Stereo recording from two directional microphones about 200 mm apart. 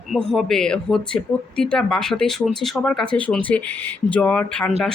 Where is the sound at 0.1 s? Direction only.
Centre (ahead or behind).